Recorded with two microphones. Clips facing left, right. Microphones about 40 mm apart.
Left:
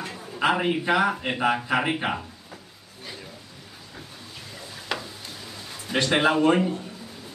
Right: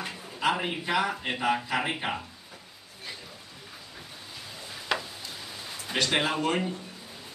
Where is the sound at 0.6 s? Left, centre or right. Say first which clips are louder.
Left 6 dB; left.